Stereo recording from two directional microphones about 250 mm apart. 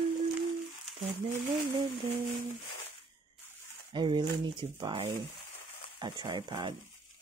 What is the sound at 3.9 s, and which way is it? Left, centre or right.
Speech, centre.